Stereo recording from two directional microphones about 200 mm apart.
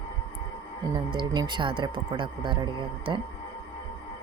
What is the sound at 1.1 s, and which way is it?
Speech, 20° right (ahead or behind).